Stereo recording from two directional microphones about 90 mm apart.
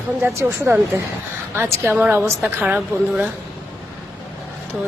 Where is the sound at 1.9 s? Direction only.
15° right (ahead or behind).